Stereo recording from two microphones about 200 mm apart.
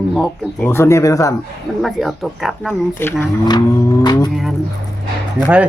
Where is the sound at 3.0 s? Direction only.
10° left (ahead or behind).